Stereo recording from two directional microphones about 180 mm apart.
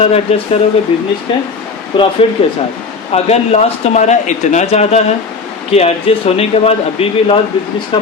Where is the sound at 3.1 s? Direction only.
35° left (ahead or behind).